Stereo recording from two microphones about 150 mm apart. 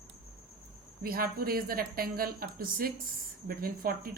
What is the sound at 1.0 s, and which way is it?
A woman's voice, 80° right.